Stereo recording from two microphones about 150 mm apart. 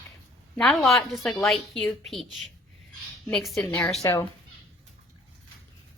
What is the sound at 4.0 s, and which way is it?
Speech, 20° left (ahead or behind).